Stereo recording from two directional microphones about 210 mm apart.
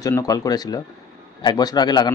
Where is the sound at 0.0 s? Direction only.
15° left (ahead or behind).